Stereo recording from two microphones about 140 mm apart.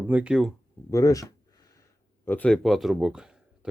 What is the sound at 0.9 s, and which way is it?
Speech, 25° left (ahead or behind).